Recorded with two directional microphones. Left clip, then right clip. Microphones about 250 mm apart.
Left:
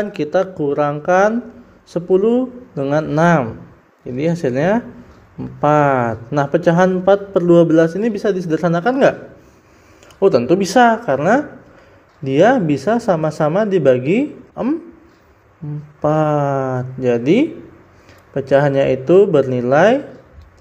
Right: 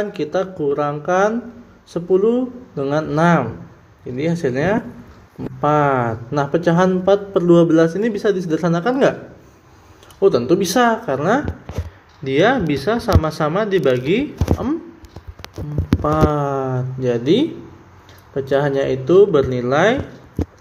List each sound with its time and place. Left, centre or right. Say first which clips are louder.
0.0 s a man's voice: left 3 dB; centre
10.2 s a man's voice: left 2 dB; centre
16.0 s speech: left 3 dB; centre
18.5 s speech: left 4 dB; centre